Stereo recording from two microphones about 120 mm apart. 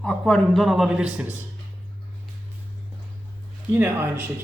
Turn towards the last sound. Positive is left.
turn(degrees=-20)  # may be behind; listen again after turning